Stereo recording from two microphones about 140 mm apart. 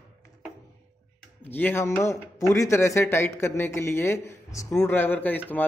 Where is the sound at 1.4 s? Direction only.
15° left (ahead or behind).